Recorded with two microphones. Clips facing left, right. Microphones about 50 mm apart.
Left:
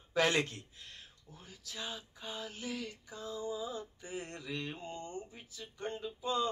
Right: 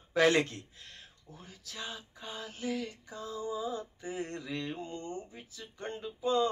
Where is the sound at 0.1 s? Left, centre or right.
Right.